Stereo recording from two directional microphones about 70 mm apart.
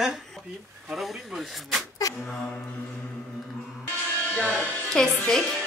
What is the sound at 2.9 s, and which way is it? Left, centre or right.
Music, centre.